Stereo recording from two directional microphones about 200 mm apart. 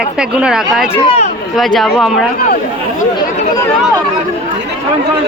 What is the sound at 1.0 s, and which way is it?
Speech, 30° left (ahead or behind).